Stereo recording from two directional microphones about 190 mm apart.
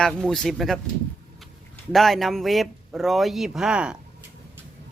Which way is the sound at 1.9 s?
Centre (ahead or behind).